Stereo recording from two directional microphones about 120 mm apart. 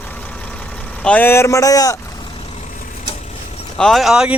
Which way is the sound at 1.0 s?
10° left (ahead or behind).